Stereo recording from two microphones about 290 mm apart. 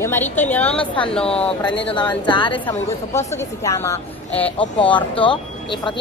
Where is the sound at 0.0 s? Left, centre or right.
Centre.